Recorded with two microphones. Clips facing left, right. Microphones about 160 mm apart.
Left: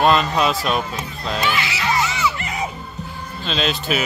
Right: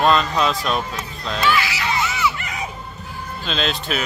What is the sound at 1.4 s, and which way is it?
Speech, 20° left (ahead or behind).